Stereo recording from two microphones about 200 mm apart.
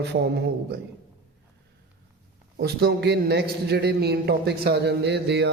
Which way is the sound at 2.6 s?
55° right (ahead or behind).